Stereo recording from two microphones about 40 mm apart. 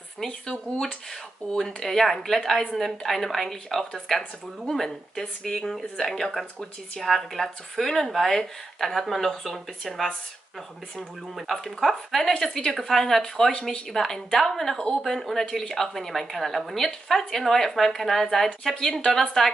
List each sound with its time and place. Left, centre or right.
1.4 s speech: left
1.8 s a woman's voice: centre
11.3 s a woman's voice: centre